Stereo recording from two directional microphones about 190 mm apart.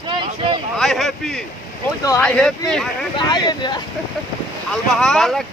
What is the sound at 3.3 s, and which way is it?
Speech, 25° left (ahead or behind).